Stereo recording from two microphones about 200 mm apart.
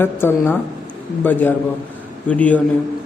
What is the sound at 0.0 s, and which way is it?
A man's voice, 10° left (ahead or behind).